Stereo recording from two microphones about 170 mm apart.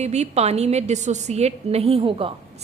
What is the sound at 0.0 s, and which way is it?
A woman's voice, 40° right (ahead or behind).